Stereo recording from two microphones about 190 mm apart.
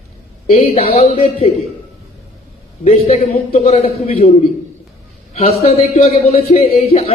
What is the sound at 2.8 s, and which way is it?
A man's voice, 30° left (ahead or behind).